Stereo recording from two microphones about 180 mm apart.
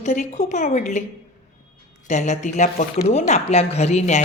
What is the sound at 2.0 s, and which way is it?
A woman's voice, 40° left (ahead or behind).